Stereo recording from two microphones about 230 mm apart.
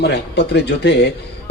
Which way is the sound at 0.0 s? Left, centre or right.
Left.